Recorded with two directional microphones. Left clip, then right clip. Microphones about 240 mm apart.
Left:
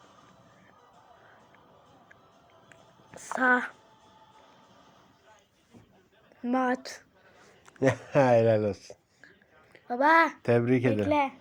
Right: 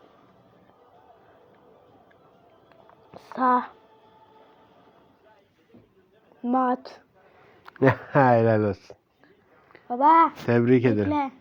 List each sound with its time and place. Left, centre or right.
2.6 s a sound: centre
6.4 s speech: centre
7.6 s speech: right
9.9 s speech: centre
10.4 s speech: centre